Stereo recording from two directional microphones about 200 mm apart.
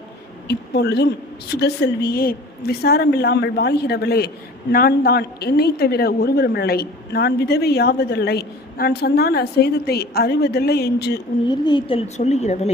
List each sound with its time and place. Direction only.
0.4 s a man's voice: 55° left (ahead or behind)
11.4 s a woman's voice: 20° left (ahead or behind)